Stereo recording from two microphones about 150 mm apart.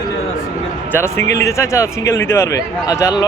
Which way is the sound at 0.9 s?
15° left (ahead or behind).